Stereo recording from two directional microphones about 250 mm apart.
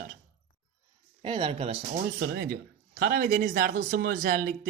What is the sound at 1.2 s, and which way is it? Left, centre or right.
Speech, centre.